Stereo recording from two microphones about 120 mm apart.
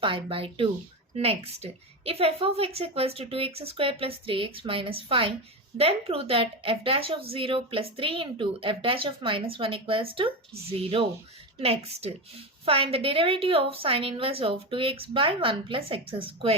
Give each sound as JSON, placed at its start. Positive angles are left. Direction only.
{"t": 0.0, "sound": "a woman's voice", "side_deg": -50}